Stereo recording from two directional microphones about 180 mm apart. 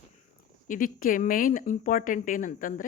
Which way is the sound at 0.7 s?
50° left (ahead or behind).